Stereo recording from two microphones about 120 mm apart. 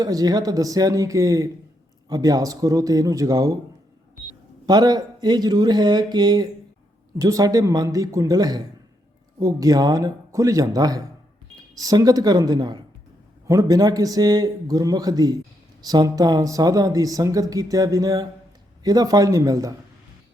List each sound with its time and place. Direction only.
0.0 s speech: 35° right (ahead or behind)
4.6 s speech: 35° right (ahead or behind)